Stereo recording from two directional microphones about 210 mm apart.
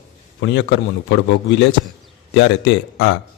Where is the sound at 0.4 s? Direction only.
60° left (ahead or behind).